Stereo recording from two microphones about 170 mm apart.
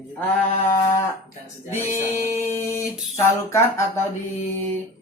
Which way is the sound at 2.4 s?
15° left (ahead or behind).